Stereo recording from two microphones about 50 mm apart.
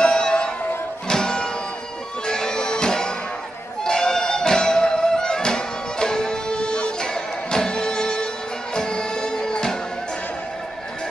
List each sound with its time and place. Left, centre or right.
0.0 s music: centre